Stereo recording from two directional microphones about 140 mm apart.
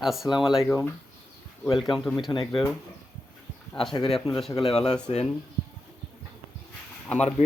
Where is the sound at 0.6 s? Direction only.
15° left (ahead or behind).